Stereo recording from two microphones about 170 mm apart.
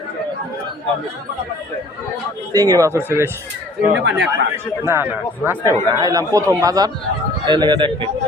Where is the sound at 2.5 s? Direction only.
20° right (ahead or behind).